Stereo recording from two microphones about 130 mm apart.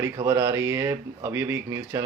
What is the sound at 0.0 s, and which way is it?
Speech, 25° right (ahead or behind).